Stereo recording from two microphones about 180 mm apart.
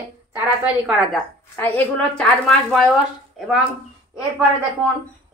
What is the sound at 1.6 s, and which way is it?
Speech, 5° left (ahead or behind).